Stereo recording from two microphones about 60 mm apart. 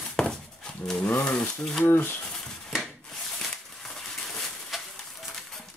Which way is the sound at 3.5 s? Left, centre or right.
Centre.